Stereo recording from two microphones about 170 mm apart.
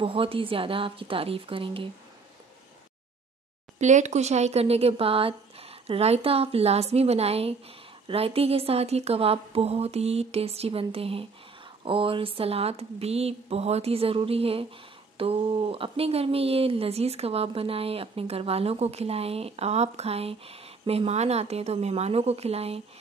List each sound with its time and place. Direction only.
0.0 s speech: 30° right (ahead or behind)
3.7 s speech: 45° right (ahead or behind)